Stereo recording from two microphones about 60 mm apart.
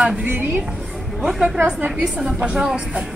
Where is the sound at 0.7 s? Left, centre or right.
Centre.